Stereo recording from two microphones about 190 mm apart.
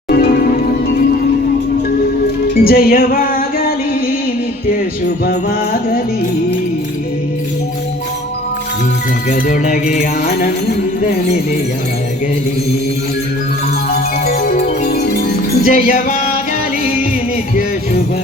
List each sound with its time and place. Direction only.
0.1 s music: 50° left (ahead or behind)
2.6 s music: 50° left (ahead or behind)
5.2 s music: 50° left (ahead or behind)
9.3 s music: 45° left (ahead or behind)
14.3 s music: 50° left (ahead or behind)